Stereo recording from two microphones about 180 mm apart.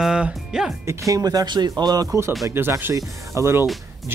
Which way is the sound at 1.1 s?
20° right (ahead or behind).